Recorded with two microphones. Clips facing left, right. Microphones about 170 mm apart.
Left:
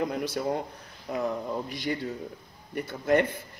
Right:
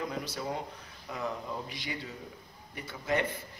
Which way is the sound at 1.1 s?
45° left (ahead or behind).